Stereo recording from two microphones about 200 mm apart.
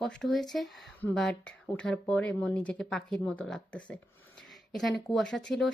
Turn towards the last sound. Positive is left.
turn(degrees=5)  # may be behind; listen again after turning